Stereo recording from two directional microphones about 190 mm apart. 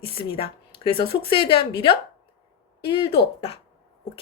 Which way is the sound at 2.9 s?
25° left (ahead or behind).